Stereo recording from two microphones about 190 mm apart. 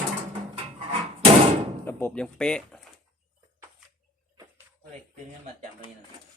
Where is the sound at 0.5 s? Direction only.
30° right (ahead or behind).